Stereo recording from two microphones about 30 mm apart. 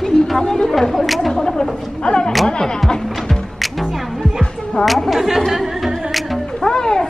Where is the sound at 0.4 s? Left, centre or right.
Left.